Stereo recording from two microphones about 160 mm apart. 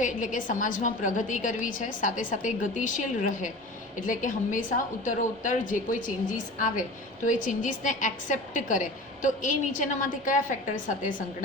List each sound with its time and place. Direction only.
0.0 s a woman's voice: 55° left (ahead or behind)